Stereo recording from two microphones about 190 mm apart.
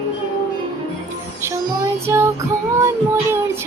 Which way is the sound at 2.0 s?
15° right (ahead or behind).